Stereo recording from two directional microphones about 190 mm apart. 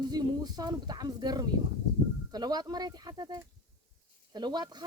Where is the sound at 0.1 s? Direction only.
20° right (ahead or behind).